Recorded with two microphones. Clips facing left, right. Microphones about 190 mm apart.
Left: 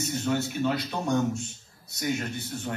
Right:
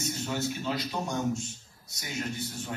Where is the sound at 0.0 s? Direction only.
60° left (ahead or behind).